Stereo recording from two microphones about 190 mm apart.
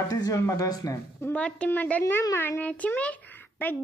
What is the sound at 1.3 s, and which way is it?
A child's voice, 5° left (ahead or behind).